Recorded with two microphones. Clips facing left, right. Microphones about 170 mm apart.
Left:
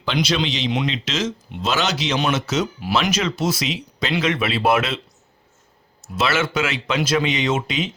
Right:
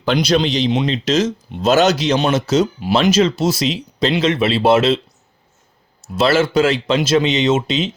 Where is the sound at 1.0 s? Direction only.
40° right (ahead or behind).